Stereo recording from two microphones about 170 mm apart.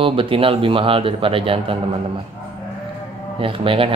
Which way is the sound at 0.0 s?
30° right (ahead or behind).